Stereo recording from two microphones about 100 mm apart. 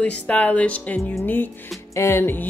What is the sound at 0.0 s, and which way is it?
A woman's voice, 15° left (ahead or behind).